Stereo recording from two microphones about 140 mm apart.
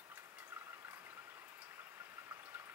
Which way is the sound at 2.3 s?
15° right (ahead or behind).